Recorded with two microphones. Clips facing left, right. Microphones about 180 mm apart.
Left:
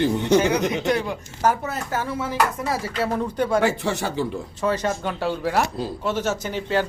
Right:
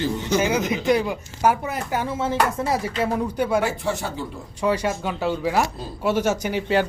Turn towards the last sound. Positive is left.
turn(degrees=-15)  # may be behind; listen again after turning